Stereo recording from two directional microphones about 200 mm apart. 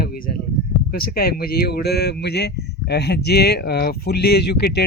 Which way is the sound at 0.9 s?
50° left (ahead or behind).